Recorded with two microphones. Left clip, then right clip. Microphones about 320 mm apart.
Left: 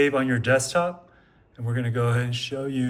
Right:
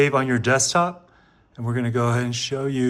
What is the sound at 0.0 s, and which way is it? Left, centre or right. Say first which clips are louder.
Speech: right 2 dB; centre.